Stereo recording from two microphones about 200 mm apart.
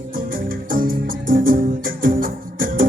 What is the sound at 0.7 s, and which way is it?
Music, 45° right (ahead or behind).